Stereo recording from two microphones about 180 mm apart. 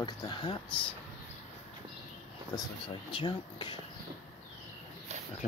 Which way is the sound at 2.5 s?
25° left (ahead or behind).